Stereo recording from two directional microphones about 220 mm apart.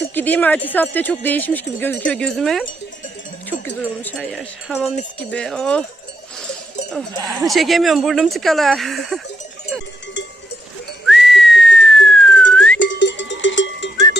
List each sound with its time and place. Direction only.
0.1 s speech: 10° left (ahead or behind)
3.8 s speech: 10° left (ahead or behind)
7.2 s speech: 15° right (ahead or behind)
7.4 s speech: centre (ahead or behind)
11.0 s whistling: centre (ahead or behind)
12.5 s music: 5° left (ahead or behind)
12.8 s cowbell: 55° left (ahead or behind)